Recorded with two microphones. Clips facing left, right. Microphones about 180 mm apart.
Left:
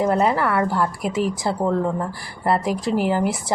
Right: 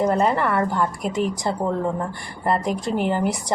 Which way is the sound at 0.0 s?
5° left (ahead or behind).